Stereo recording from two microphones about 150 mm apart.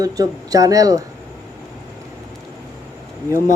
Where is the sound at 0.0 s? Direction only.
25° right (ahead or behind).